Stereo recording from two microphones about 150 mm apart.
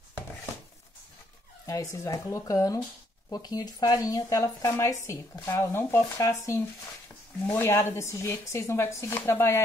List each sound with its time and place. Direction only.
1.7 s speech: 20° left (ahead or behind)